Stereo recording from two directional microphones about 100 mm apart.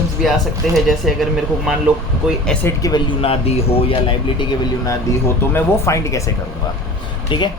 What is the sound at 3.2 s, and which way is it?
A man's voice, 85° left.